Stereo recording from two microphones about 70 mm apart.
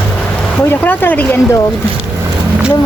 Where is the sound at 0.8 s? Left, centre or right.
Left.